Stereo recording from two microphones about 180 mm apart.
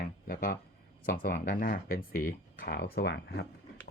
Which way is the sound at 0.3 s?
55° left (ahead or behind).